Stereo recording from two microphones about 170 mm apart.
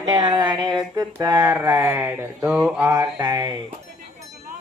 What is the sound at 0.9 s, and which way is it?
Mantra, 25° right (ahead or behind).